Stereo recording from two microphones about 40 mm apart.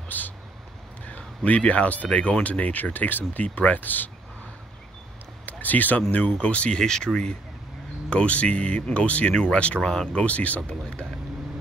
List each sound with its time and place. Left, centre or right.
0.1 s speech: left
1.0 s speech: left
5.4 s a sound: left
6.1 s speech: left
6.8 s speech: centre
8.1 s speech: left
9.8 s speech: centre
10.2 s speech: left
10.7 s speech: left